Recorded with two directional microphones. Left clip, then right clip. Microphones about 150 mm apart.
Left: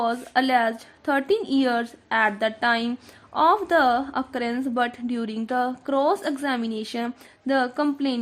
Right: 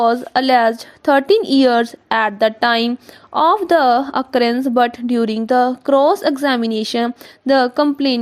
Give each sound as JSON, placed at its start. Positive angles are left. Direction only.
{"t": 0.0, "sound": "a woman's voice", "side_deg": -50}